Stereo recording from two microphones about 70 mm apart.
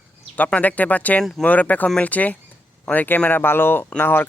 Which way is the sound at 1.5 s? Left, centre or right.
Left.